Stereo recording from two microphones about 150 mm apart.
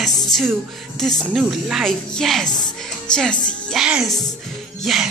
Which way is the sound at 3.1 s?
5° left (ahead or behind).